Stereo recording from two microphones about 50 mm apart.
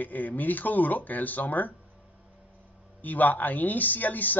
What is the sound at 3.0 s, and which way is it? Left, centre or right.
A man's voice, left.